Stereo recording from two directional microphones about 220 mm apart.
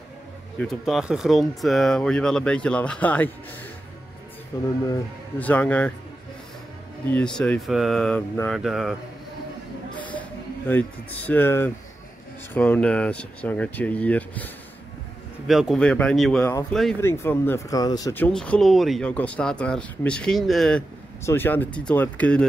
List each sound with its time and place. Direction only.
0.6 s speech: centre (ahead or behind)
4.5 s speech: 15° left (ahead or behind)
5.4 s speech: 5° left (ahead or behind)
7.1 s speech: 5° left (ahead or behind)
9.9 s a sound: 5° left (ahead or behind)
10.7 s speech: 10° left (ahead or behind)